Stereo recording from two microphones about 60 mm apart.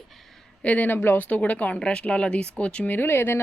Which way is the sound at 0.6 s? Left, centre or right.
Left.